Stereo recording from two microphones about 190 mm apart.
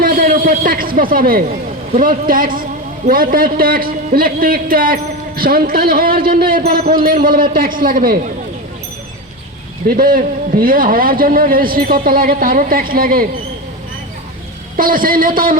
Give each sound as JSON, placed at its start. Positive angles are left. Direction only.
{"t": 0.0, "sound": "a woman's voice", "side_deg": -50}
{"t": 9.8, "sound": "a man's voice", "side_deg": -50}
{"t": 14.8, "sound": "a man's voice", "side_deg": -45}